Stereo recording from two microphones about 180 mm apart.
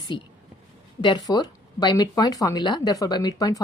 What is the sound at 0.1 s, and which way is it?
Speech, 25° left (ahead or behind).